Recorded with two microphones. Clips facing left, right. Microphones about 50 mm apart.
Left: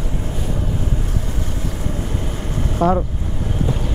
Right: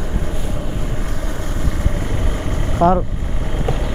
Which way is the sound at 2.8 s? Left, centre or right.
Centre.